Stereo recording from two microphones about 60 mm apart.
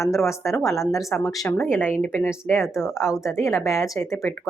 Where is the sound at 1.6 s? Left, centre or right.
Left.